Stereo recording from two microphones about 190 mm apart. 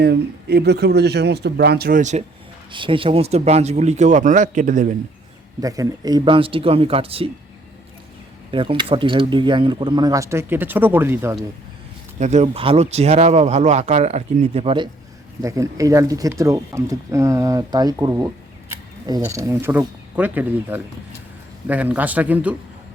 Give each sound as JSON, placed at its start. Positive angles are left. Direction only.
{"t": 0.0, "sound": "a man's voice", "side_deg": -60}
{"t": 2.0, "sound": "speech", "side_deg": -40}
{"t": 2.7, "sound": "speech", "side_deg": -25}
{"t": 5.5, "sound": "speech", "side_deg": -20}
{"t": 8.4, "sound": "speech", "side_deg": -25}
{"t": 12.2, "sound": "speech", "side_deg": -35}
{"t": 15.4, "sound": "speech", "side_deg": -15}